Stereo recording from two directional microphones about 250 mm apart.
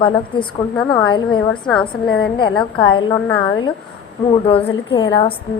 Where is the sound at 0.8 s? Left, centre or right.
Centre.